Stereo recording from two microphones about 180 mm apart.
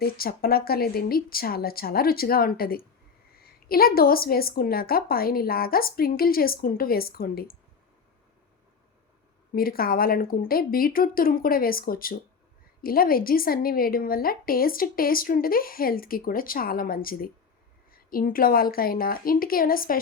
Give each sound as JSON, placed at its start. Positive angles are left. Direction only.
{"t": 0.0, "sound": "a woman's voice", "side_deg": 55}
{"t": 9.6, "sound": "a woman's voice", "side_deg": 55}